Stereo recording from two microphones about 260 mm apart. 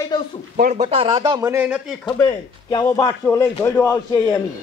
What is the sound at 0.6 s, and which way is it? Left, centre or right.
Speech, right.